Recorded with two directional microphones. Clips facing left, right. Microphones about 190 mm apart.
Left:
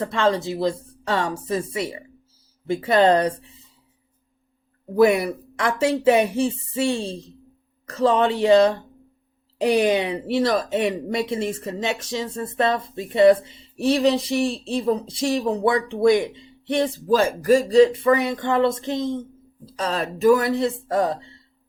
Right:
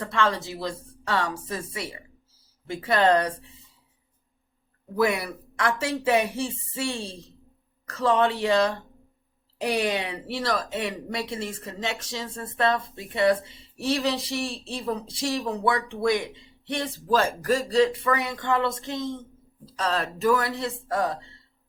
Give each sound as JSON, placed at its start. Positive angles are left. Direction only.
{"t": 0.0, "sound": "speech", "side_deg": 20}
{"t": 4.9, "sound": "speech", "side_deg": 20}